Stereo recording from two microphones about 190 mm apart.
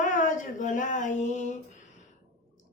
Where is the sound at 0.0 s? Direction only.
45° left (ahead or behind).